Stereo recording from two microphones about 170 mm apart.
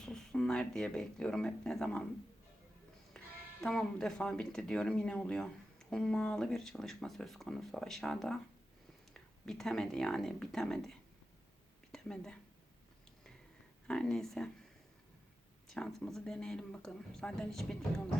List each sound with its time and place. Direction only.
0.0 s speech: 5° left (ahead or behind)
3.1 s music: 5° left (ahead or behind)
3.6 s a woman's voice: centre (ahead or behind)
13.8 s speech: 5° left (ahead or behind)
15.7 s speech: centre (ahead or behind)